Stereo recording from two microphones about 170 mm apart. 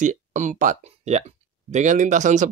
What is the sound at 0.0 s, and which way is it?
Speech, 45° right (ahead or behind).